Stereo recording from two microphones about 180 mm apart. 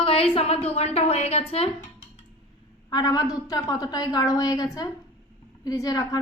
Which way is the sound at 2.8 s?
20° left (ahead or behind).